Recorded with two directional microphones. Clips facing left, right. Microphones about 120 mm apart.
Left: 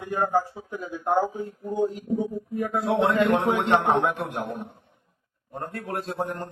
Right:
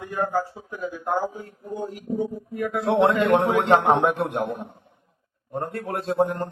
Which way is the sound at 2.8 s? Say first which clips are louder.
Right 3 dB; 25° right (ahead or behind).